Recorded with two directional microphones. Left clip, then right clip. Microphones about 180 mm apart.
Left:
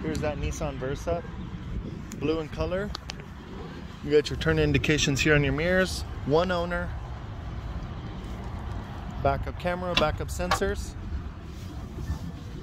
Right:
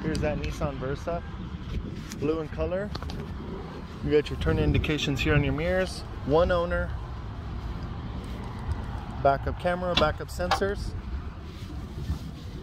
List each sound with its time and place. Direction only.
0.0 s speech: 30° left (ahead or behind)
2.2 s speech: 35° left (ahead or behind)
4.4 s speech: 65° left (ahead or behind)
6.3 s speech: 15° left (ahead or behind)
9.2 s speech: 5° left (ahead or behind)